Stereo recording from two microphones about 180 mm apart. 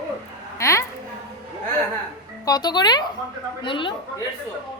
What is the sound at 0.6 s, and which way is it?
Speech, 15° left (ahead or behind).